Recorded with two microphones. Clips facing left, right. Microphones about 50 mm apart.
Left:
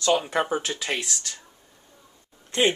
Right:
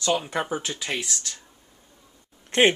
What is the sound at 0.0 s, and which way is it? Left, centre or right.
Speech, centre.